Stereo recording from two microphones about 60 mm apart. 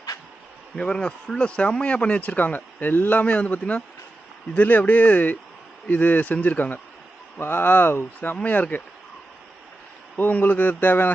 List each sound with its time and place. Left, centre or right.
0.8 s speech: centre; by 8.4 s left
8.4 s speech: left
10.2 s speech: left